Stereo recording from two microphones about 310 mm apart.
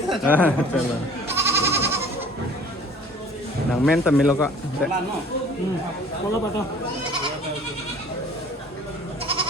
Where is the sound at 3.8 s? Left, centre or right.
Centre.